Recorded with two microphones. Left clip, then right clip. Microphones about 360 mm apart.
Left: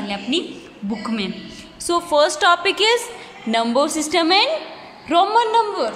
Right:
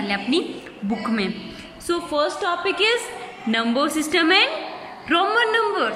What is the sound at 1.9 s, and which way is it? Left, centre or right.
A woman's voice, left.